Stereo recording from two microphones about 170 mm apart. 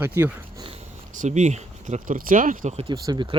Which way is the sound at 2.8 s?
25° right (ahead or behind).